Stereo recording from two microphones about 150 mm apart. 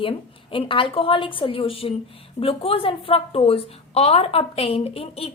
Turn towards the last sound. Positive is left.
turn(degrees=40)  # may be behind; listen again after turning